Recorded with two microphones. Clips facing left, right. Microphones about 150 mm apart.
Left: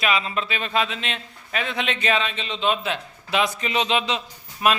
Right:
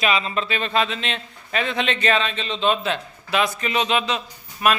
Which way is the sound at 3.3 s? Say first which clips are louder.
Right 1 dB; 20° left (ahead or behind).